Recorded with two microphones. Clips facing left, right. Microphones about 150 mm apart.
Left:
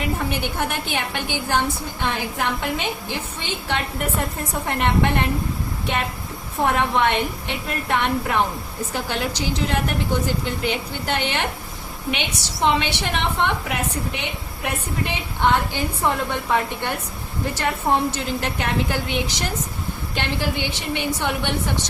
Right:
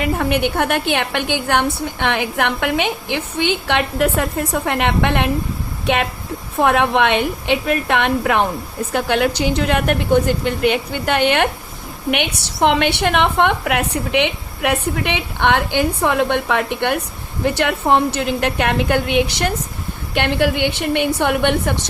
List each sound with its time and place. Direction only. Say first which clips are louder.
0.0 s a woman's voice: right 7 dB; 65° right (ahead or behind)
8.9 s a woman's voice: right 9 dB; 65° right (ahead or behind)